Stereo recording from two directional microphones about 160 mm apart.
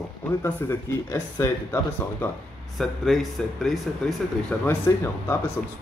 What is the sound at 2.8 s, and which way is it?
Speech, centre (ahead or behind).